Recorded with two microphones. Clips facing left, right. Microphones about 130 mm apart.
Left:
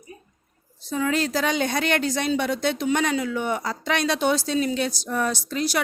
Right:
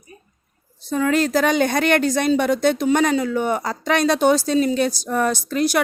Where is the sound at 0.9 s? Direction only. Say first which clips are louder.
Right 5 dB; 55° right (ahead or behind).